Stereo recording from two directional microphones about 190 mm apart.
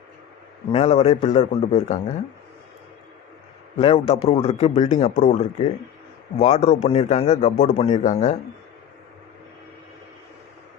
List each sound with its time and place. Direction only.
0.7 s a man's voice: 35° left (ahead or behind)
3.8 s a man's voice: 30° left (ahead or behind)